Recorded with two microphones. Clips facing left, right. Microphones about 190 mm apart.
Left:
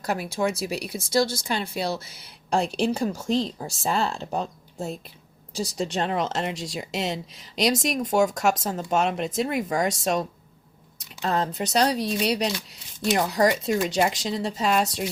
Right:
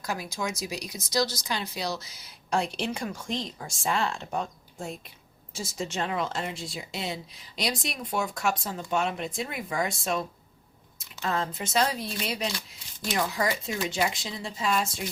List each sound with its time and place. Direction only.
0.1 s speech: 60° left (ahead or behind)
0.9 s speech: 30° left (ahead or behind)
1.5 s speech: 55° left (ahead or behind)
2.5 s speech: 35° left (ahead or behind)
6.3 s speech: 80° left
6.7 s speech: 90° left
7.9 s speech: 40° left (ahead or behind)